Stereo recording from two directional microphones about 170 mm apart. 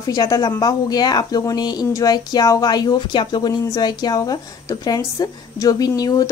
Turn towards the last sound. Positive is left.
turn(degrees=20)  # may be behind; listen again after turning